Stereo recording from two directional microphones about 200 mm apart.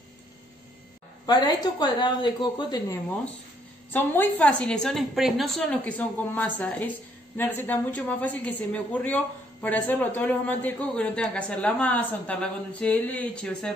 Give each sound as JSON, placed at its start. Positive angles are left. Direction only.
{"t": 1.2, "sound": "a woman's voice", "side_deg": 20}
{"t": 3.9, "sound": "a woman's voice", "side_deg": 10}